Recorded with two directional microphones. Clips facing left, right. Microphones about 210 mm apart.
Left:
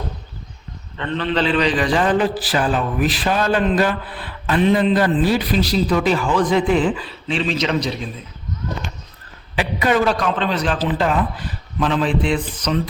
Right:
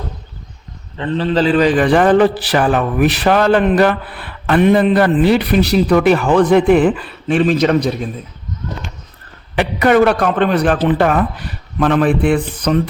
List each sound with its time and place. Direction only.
0.9 s a man's voice: 35° right (ahead or behind); by 8.1 s 50° right (ahead or behind)
9.6 s a man's voice: 60° right (ahead or behind)